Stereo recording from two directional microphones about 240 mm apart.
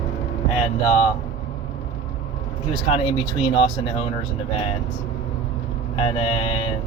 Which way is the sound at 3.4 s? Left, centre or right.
Left.